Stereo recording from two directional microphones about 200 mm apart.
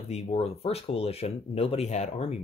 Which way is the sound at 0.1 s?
30° left (ahead or behind).